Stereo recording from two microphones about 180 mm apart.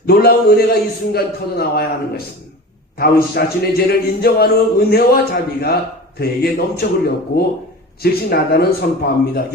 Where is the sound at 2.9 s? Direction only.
60° left (ahead or behind).